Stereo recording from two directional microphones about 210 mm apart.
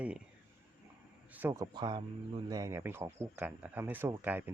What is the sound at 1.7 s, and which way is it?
Speech, 20° right (ahead or behind).